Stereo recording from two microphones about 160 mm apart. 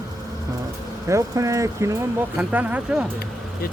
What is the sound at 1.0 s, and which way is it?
Speech, 20° right (ahead or behind).